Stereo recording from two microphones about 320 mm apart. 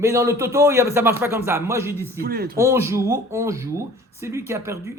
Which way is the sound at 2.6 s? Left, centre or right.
Centre.